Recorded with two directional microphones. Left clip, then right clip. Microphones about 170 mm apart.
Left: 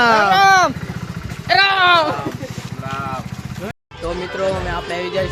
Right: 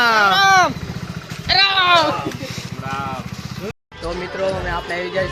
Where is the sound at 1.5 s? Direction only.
60° left (ahead or behind); by 2.0 s 80° left.